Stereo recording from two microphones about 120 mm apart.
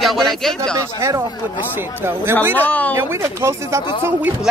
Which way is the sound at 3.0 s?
25° right (ahead or behind).